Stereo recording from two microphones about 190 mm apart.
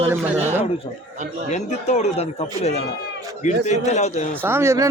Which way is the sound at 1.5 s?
35° left (ahead or behind).